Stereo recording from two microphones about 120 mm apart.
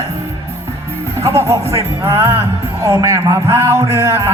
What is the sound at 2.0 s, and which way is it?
Speech, 20° right (ahead or behind).